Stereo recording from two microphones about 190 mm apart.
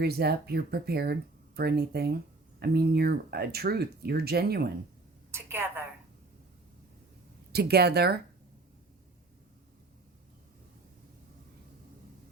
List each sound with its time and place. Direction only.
0.0 s speech: 55° right (ahead or behind)
5.3 s a sound: 10° right (ahead or behind)
7.5 s speech: 55° right (ahead or behind)